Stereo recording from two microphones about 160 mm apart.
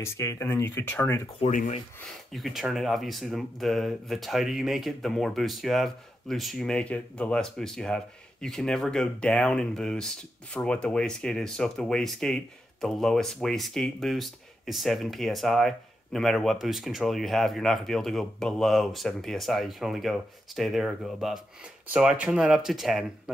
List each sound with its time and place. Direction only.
0.0 s speech: 20° left (ahead or behind)
1.5 s speech: 55° left (ahead or behind)
2.3 s speech: centre (ahead or behind)